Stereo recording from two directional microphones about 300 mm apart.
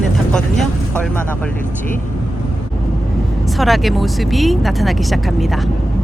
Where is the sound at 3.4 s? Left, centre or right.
Centre.